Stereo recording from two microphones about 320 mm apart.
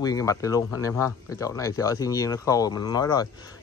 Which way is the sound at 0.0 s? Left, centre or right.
Centre.